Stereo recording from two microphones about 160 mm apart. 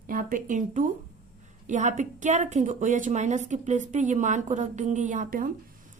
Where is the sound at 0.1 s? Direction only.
60° right (ahead or behind).